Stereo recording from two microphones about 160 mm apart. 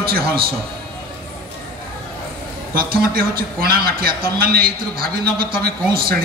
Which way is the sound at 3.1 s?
70° right (ahead or behind).